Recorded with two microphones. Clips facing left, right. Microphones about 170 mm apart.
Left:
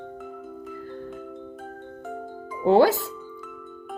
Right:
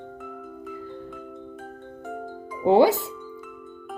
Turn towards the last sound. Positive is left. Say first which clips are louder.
# even
turn(degrees=-20)  # may be behind; listen again after turning